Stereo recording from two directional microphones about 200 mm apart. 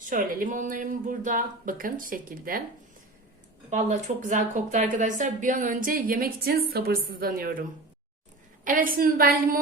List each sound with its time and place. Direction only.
0.1 s a woman's voice: 40° right (ahead or behind)
3.7 s a woman's voice: 35° right (ahead or behind)
8.6 s a woman's voice: 45° right (ahead or behind)